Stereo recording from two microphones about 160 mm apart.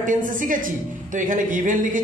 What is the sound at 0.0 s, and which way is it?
A man's voice, 55° right (ahead or behind).